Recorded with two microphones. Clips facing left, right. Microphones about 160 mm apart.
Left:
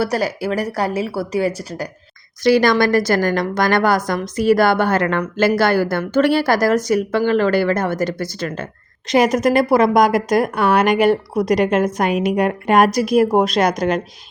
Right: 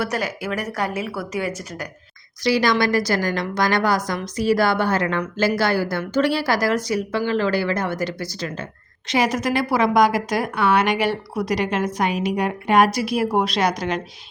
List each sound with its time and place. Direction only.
0.0 s speech: 35° left (ahead or behind)
2.4 s a woman's voice: 50° left (ahead or behind)